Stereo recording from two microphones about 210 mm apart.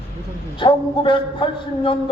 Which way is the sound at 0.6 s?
25° left (ahead or behind).